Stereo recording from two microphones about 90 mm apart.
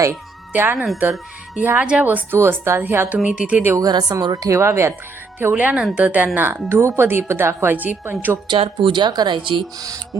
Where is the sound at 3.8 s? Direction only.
50° right (ahead or behind); by 4.9 s 30° right (ahead or behind).